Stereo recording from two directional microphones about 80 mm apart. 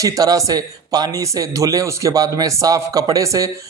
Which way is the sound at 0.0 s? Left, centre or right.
Right.